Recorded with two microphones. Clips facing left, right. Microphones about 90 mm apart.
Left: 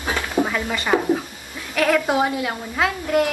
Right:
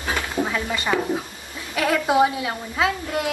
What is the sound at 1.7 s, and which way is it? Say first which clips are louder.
A woman's voice: left 1 dB; 10° right (ahead or behind).